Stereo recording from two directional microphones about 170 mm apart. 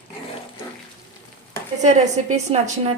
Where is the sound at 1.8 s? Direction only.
45° right (ahead or behind).